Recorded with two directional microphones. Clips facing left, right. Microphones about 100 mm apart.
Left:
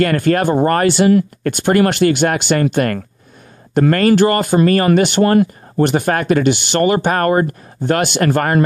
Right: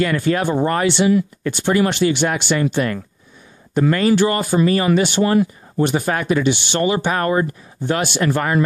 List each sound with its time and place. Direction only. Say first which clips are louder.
0.0 s speech: left 4 dB; 55° left (ahead or behind)